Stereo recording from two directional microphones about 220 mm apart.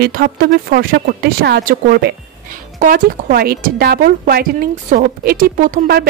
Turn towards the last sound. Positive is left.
turn(degrees=-40)  # may be behind; listen again after turning